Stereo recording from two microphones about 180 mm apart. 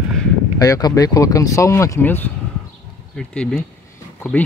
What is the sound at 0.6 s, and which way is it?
Speech, 20° left (ahead or behind).